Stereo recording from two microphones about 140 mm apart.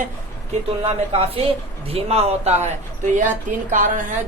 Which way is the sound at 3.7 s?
70° right (ahead or behind).